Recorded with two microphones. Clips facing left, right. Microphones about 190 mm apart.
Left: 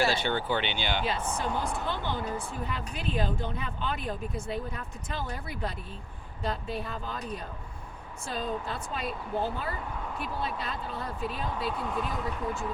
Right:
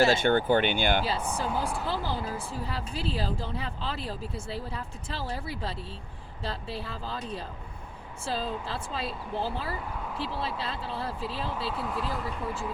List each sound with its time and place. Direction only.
0.0 s speech: 45° right (ahead or behind)
1.5 s speech: 5° right (ahead or behind)
1.9 s a woman's voice: 35° right (ahead or behind)
11.7 s speech: 5° right (ahead or behind)